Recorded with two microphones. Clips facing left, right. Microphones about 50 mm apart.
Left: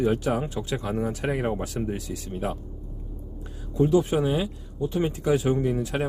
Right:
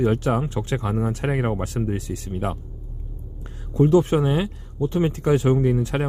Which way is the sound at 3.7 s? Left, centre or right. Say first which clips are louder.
Right 4 dB; right.